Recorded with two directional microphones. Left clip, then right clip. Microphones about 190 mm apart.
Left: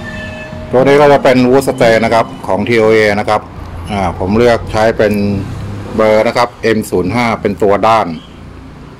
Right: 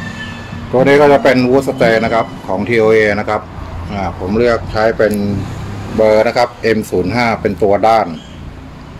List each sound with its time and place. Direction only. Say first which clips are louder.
0.7 s a man's voice: left 2 dB; 20° left (ahead or behind)